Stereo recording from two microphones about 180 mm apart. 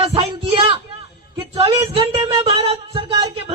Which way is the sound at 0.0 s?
35° right (ahead or behind).